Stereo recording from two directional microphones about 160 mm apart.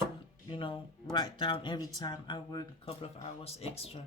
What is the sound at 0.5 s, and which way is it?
Speech, 30° left (ahead or behind).